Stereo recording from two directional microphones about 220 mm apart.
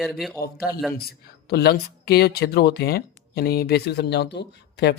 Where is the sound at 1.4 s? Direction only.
45° left (ahead or behind).